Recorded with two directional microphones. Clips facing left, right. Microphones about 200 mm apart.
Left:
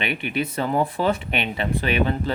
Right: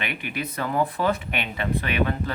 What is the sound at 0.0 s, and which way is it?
Speech, 25° left (ahead or behind).